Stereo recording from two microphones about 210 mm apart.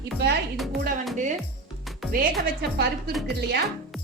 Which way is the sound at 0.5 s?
Centre (ahead or behind).